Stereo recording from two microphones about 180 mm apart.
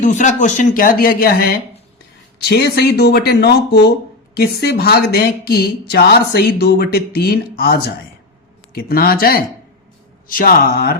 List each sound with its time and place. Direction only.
0.0 s speech: 45° left (ahead or behind)